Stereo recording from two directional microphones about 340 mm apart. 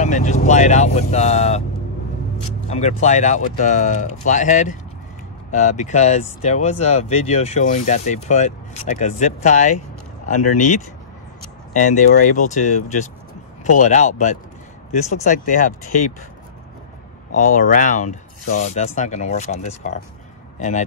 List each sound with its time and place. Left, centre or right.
0.0 s speech: left
2.7 s speech: centre
17.3 s a man's voice: left